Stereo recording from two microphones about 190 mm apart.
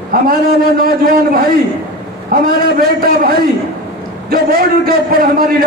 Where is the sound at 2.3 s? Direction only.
50° right (ahead or behind).